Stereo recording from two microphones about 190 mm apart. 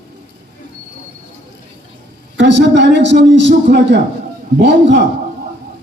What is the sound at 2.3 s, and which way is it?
A man's voice, 70° right (ahead or behind).